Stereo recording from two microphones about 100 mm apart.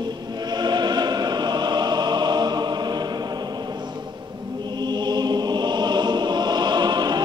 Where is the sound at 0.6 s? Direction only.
45° right (ahead or behind).